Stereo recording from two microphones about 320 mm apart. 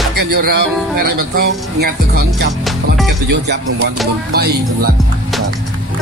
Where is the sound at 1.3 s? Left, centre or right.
Right.